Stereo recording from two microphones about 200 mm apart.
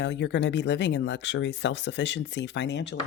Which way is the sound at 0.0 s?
60° left (ahead or behind).